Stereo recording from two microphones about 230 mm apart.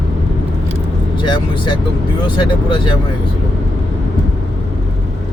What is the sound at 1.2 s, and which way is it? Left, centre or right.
Speech, left.